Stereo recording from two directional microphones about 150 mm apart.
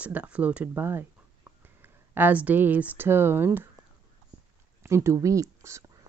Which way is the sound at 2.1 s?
10° right (ahead or behind).